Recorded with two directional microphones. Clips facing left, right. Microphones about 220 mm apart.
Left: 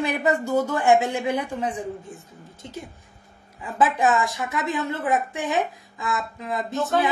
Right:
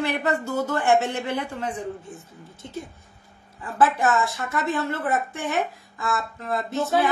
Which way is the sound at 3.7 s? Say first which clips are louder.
Even; 15° left (ahead or behind).